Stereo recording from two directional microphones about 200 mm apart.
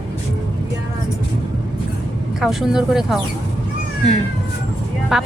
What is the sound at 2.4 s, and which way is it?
Speech, centre (ahead or behind).